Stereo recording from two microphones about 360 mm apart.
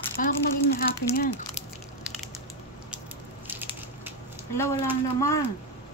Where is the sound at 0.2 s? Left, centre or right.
Left.